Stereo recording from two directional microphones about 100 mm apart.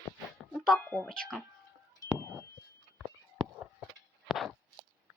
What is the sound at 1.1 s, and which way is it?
Speech, 5° left (ahead or behind).